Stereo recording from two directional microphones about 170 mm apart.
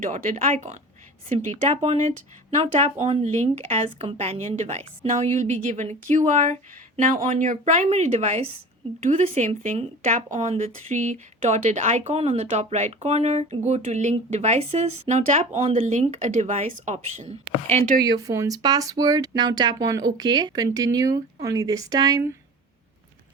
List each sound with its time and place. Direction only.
0.0 s speech: 45° right (ahead or behind)
18.0 s speech: 20° right (ahead or behind)